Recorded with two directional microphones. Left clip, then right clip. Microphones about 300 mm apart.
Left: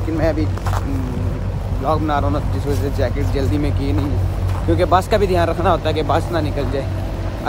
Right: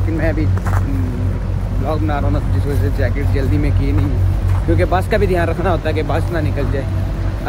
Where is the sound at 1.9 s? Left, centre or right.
Centre.